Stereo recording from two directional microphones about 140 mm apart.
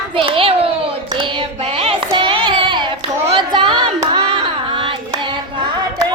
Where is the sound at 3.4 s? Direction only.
35° right (ahead or behind).